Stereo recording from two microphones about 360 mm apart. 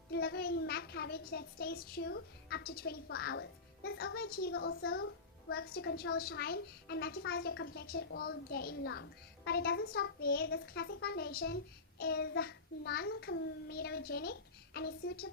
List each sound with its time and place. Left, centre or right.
0.1 s a woman's voice: left